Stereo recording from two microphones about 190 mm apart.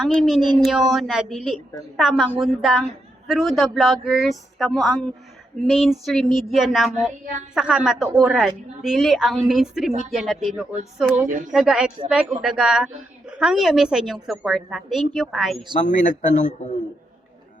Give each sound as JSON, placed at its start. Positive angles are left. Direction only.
{"t": 0.0, "sound": "a woman's voice", "side_deg": 0}
{"t": 11.3, "sound": "speech", "side_deg": -45}
{"t": 11.5, "sound": "a woman's voice", "side_deg": -5}
{"t": 15.8, "sound": "a man's voice", "side_deg": 40}